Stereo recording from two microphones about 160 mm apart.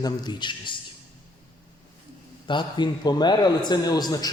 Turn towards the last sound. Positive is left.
turn(degrees=25)  # may be behind; listen again after turning